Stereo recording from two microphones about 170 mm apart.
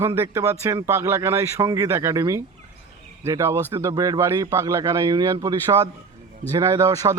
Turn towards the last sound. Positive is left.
turn(degrees=-20)  # may be behind; listen again after turning